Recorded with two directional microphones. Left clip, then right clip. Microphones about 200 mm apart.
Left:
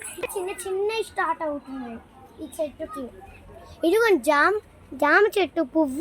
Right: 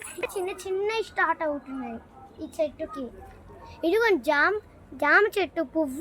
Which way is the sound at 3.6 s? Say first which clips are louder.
Left 3 dB; 45° left (ahead or behind).